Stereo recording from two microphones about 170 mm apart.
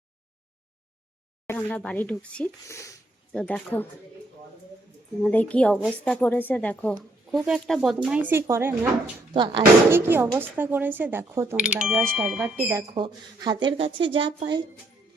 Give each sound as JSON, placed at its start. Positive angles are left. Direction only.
{"t": 1.5, "sound": "speech", "side_deg": 10}
{"t": 3.3, "sound": "speech", "side_deg": 5}
{"t": 5.2, "sound": "speech", "side_deg": 10}
{"t": 6.9, "sound": "speech", "side_deg": 0}
{"t": 9.3, "sound": "speech", "side_deg": -30}
{"t": 9.9, "sound": "speech", "side_deg": -15}
{"t": 12.5, "sound": "speech", "side_deg": -15}
{"t": 12.9, "sound": "speech", "side_deg": -25}